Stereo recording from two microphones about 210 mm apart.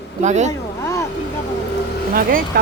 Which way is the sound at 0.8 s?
15° left (ahead or behind).